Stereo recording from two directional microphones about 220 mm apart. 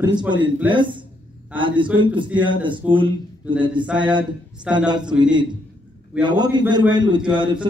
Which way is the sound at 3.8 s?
5° right (ahead or behind).